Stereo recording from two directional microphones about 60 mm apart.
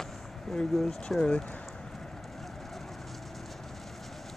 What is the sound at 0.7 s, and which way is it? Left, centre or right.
Speech, centre.